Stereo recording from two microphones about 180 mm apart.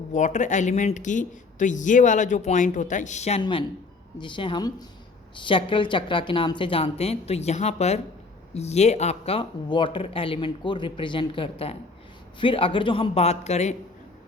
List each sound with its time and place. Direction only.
0.1 s speech: 40° left (ahead or behind)
4.2 s speech: 25° left (ahead or behind)